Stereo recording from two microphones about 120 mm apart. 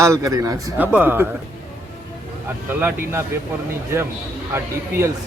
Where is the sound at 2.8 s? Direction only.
20° right (ahead or behind).